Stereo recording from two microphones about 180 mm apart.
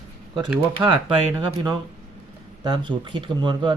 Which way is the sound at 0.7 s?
30° right (ahead or behind).